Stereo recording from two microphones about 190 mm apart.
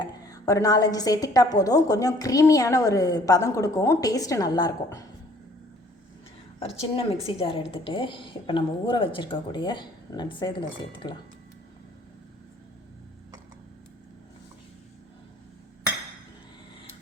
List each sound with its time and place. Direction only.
0.0 s a woman's voice: 20° left (ahead or behind)
6.7 s a woman's voice: 30° left (ahead or behind)